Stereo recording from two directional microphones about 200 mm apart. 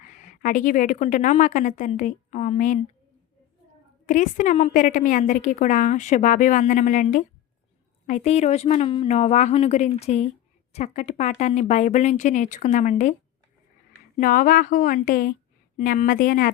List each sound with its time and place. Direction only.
0.0 s a woman's voice: 40° left (ahead or behind)
4.0 s a woman's voice: 40° left (ahead or behind)
14.2 s a woman's voice: 45° left (ahead or behind)